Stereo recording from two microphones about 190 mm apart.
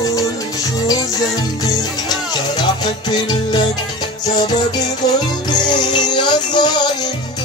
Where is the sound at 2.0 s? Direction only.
20° left (ahead or behind).